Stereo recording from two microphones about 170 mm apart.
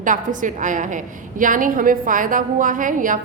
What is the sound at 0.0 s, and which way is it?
A woman's voice, 50° right (ahead or behind).